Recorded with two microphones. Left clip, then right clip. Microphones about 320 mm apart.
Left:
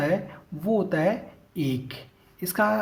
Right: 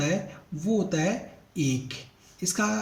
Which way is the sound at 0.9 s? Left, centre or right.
Left.